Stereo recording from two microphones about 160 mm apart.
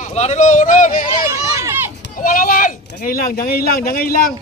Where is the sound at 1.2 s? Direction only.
20° right (ahead or behind).